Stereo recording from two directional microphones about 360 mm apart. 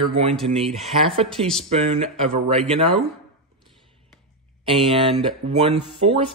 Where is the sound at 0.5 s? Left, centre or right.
Centre.